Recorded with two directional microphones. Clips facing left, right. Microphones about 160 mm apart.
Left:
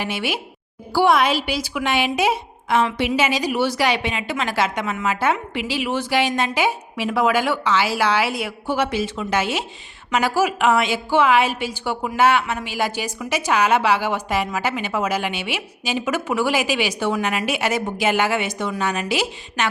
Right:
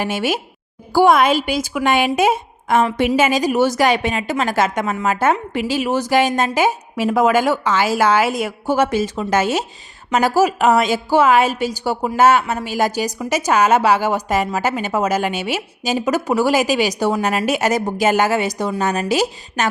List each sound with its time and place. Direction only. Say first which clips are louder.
0.0 s a woman's voice: right 5 dB; 45° right (ahead or behind)